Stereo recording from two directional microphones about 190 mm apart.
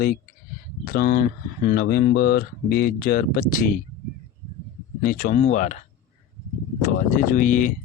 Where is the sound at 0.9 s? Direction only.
50° left (ahead or behind).